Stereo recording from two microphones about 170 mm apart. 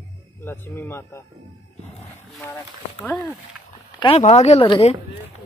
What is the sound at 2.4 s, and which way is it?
Speech, 10° left (ahead or behind).